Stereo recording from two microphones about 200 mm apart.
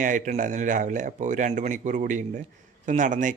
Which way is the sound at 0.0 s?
40° right (ahead or behind).